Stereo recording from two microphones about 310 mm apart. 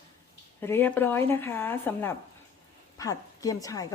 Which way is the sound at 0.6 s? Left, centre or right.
Centre.